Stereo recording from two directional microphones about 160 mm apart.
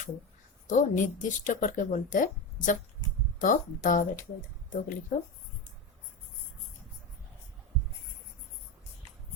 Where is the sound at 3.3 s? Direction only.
60° left (ahead or behind).